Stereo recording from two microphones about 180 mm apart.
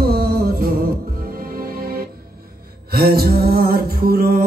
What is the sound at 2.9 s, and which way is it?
Music, 60° right (ahead or behind).